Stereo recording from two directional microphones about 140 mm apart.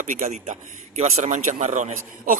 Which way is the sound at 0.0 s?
65° right (ahead or behind).